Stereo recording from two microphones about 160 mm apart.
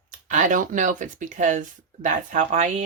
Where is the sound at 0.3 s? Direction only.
55° right (ahead or behind).